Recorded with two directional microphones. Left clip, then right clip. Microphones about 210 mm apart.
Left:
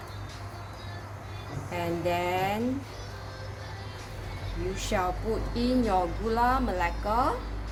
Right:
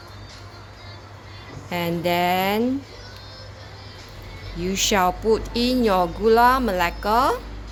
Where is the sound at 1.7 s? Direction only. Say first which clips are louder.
Right 6 dB; 50° right (ahead or behind).